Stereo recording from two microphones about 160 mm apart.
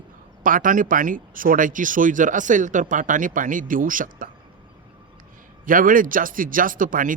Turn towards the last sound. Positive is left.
turn(degrees=-55)  # may be behind; listen again after turning